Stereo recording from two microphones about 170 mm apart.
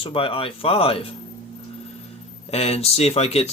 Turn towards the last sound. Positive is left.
turn(degrees=40)  # may be behind; listen again after turning